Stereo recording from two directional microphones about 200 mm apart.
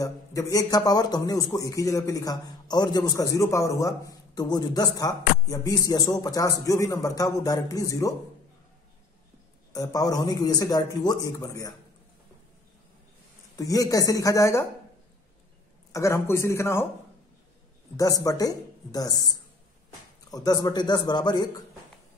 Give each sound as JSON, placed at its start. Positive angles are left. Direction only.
{"t": 0.0, "sound": "a man's voice", "side_deg": 15}
{"t": 9.7, "sound": "a man's voice", "side_deg": 20}
{"t": 13.6, "sound": "a man's voice", "side_deg": 15}
{"t": 15.9, "sound": "a man's voice", "side_deg": 15}
{"t": 17.9, "sound": "a man's voice", "side_deg": 15}